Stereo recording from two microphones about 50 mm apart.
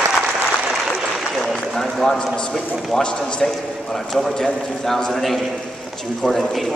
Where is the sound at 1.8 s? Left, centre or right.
Centre.